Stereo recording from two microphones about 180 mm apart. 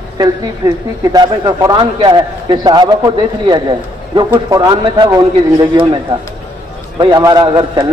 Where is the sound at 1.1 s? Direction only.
20° right (ahead or behind).